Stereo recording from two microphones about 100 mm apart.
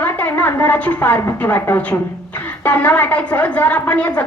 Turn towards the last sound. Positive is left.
turn(degrees=15)  # may be behind; listen again after turning